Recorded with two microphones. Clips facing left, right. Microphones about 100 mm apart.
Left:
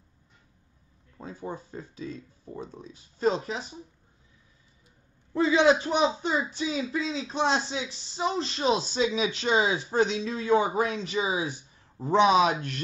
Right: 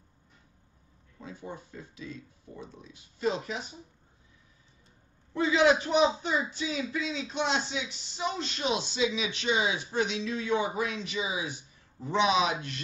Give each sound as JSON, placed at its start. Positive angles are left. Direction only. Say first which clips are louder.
{"t": 1.1, "sound": "speech", "louder": "left 5 dB", "side_deg": 40}
{"t": 5.3, "sound": "a man's voice", "louder": "left 2 dB", "side_deg": 30}